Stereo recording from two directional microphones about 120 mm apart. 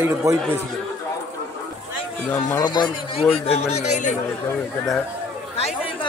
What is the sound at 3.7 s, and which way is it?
Speech, 75° left (ahead or behind).